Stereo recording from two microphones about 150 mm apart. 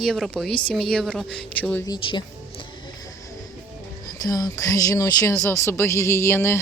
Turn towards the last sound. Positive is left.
turn(degrees=15)  # may be behind; listen again after turning